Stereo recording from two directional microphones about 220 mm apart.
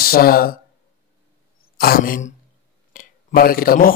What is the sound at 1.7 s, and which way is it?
Speech, 45° left (ahead or behind).